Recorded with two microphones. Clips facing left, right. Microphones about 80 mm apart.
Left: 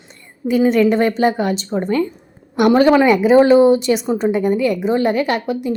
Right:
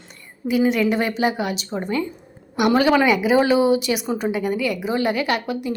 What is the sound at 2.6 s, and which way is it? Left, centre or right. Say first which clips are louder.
Speech: left 5 dB; left.